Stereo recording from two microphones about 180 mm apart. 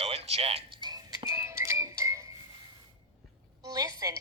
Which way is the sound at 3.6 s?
20° right (ahead or behind).